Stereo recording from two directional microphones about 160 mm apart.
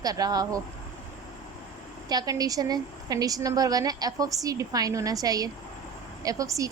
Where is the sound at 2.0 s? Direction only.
25° right (ahead or behind).